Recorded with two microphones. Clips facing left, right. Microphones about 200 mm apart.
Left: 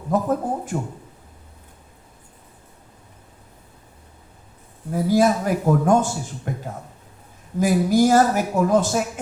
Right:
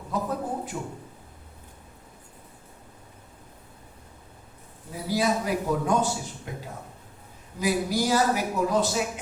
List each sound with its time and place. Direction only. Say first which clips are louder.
0.1 s a man's voice: left 8 dB; 50° left (ahead or behind)
4.9 s a man's voice: left 8 dB; 50° left (ahead or behind)
7.6 s a man's voice: left 8 dB; 50° left (ahead or behind)